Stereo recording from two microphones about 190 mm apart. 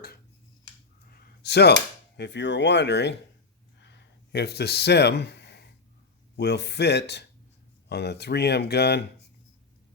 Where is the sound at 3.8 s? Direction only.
60° left (ahead or behind).